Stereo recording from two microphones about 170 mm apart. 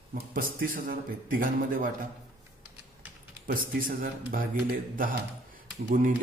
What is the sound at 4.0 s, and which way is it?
A man's voice, 55° right (ahead or behind).